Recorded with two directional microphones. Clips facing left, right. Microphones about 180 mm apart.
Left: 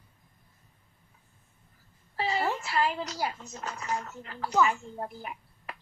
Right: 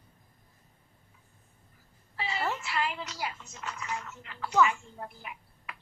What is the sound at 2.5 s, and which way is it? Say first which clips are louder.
A woman's voice: left 4 dB; 40° left (ahead or behind).